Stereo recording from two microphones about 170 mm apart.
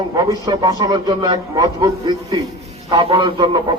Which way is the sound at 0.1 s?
25° right (ahead or behind).